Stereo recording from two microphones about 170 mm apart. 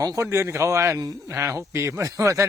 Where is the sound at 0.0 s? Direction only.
20° right (ahead or behind).